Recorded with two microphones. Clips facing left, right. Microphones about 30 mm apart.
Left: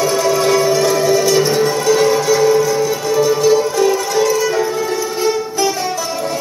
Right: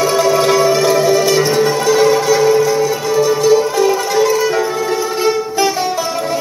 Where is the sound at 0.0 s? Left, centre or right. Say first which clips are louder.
Right 2 dB; centre.